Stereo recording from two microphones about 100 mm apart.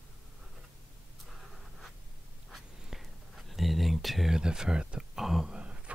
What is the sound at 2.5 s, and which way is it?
Writing, centre (ahead or behind).